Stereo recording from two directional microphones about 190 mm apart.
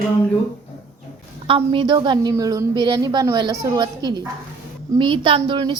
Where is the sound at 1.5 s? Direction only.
25° right (ahead or behind).